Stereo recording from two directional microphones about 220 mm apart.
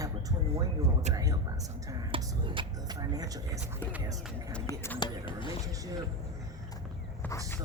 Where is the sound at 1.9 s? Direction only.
20° right (ahead or behind).